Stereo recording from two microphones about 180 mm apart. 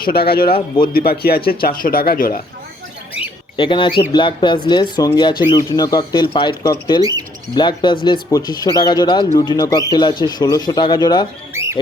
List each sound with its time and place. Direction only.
0.0 s speech: 60° left (ahead or behind)
3.2 s bird: 30° left (ahead or behind)
4.1 s speech: 25° left (ahead or behind)
7.0 s speech: 20° right (ahead or behind)
7.5 s speech: 25° left (ahead or behind)
11.5 s rodents: 15° right (ahead or behind)